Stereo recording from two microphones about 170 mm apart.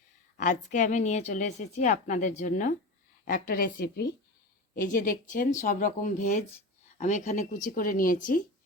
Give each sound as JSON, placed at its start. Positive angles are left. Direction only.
{"t": 0.3, "sound": "a woman's voice", "side_deg": 45}